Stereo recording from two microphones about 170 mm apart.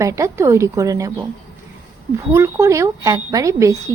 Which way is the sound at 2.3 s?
15° right (ahead or behind).